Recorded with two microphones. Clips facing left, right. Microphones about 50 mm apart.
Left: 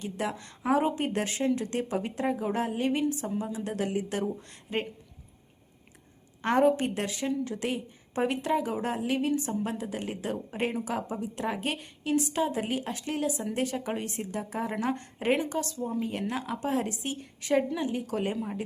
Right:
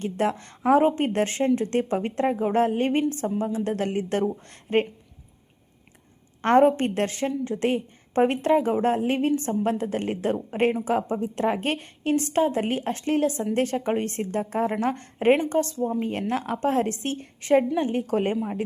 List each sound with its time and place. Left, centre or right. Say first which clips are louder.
0.0 s a woman's voice: right 7 dB; right
6.4 s a woman's voice: right 6 dB; right
7.3 s a woman's voice: right 5 dB; right